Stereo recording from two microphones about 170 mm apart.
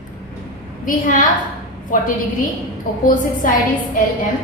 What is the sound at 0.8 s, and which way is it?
A woman's voice, 50° left (ahead or behind).